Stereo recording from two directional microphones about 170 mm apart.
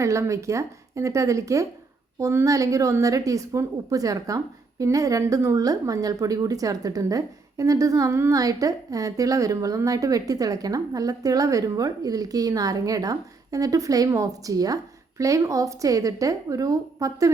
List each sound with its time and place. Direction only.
0.0 s a woman's voice: 15° right (ahead or behind)